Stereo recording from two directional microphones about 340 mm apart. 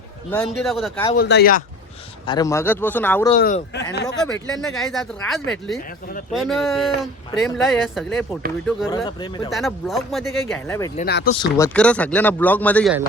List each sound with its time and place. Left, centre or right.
0.3 s speech: centre
1.1 s speech: left
2.2 s speech: centre
3.4 s speech: left
4.2 s speech: centre
9.0 s speech: centre
9.5 s speech: centre
11.0 s speech: left
11.3 s speech: centre